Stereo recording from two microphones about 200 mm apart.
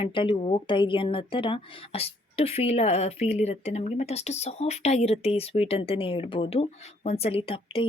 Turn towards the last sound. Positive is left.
turn(degrees=30)  # may be behind; listen again after turning